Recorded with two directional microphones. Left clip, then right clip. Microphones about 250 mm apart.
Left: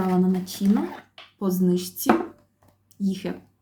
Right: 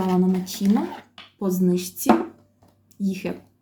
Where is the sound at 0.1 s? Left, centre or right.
Centre.